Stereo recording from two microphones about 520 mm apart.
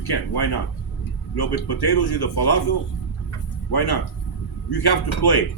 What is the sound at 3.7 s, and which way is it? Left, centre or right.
A man's voice, left.